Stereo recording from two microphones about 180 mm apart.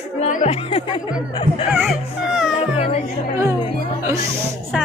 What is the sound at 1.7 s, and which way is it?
Speech, 5° right (ahead or behind).